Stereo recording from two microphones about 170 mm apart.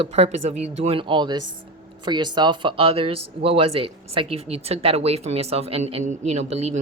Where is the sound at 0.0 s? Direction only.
40° right (ahead or behind).